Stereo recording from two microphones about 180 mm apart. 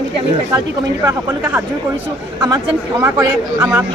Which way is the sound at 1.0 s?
15° right (ahead or behind).